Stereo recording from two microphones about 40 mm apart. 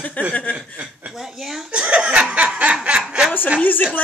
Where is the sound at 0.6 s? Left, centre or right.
Right.